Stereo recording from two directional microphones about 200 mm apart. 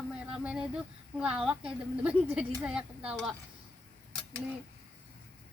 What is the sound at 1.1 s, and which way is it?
A woman's voice, 5° right (ahead or behind).